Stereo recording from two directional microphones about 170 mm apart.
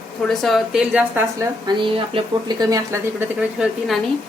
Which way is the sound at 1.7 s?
25° right (ahead or behind).